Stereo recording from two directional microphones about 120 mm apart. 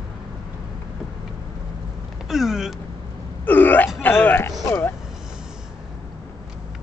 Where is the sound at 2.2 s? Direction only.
5° right (ahead or behind).